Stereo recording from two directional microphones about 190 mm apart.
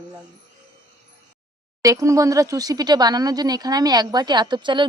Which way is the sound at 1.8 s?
15° right (ahead or behind).